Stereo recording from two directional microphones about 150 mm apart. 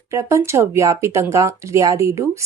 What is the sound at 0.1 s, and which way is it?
A woman's voice, 20° right (ahead or behind).